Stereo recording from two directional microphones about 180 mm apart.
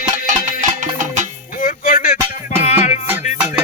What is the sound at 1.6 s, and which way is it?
Music, 50° left (ahead or behind).